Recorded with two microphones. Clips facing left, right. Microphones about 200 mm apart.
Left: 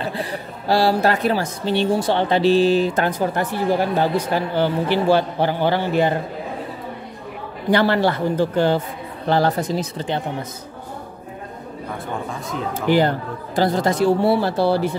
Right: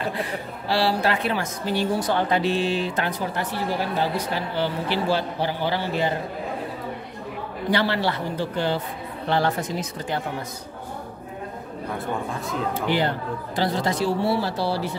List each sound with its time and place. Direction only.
0.1 s a woman's voice: 35° left (ahead or behind); by 6.1 s 55° left (ahead or behind)
7.7 s a woman's voice: 50° left (ahead or behind); by 10.2 s 25° left (ahead or behind)
12.7 s a woman's voice: 45° left (ahead or behind)